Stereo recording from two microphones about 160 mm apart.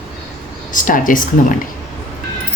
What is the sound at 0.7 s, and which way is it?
Speech, 55° left (ahead or behind).